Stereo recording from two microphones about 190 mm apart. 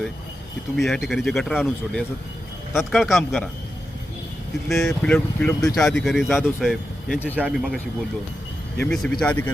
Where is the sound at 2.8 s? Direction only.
Centre (ahead or behind).